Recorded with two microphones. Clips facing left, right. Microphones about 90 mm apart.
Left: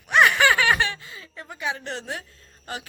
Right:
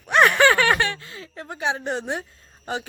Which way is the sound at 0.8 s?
30° right (ahead or behind).